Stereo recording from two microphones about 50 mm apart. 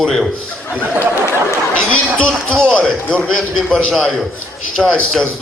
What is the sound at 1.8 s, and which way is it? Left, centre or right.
Speech, left.